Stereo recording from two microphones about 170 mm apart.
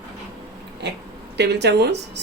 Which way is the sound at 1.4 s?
80° right.